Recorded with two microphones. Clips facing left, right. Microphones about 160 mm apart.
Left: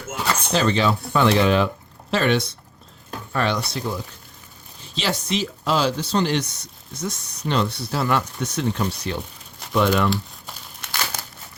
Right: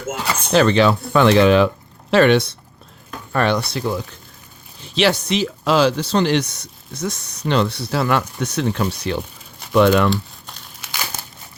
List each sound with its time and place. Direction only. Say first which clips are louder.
0.5 s speech: right 7 dB; 70° right (ahead or behind)
3.3 s speech: right 5 dB; 60° right (ahead or behind); by 10.1 s 85° right
10.1 s crumpling: right 3 dB; centre (ahead or behind)